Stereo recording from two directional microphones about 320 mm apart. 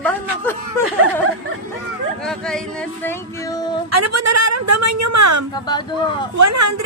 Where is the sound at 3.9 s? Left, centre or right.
Right.